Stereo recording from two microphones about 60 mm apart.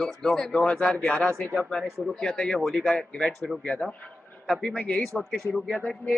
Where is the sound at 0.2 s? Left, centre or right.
Centre.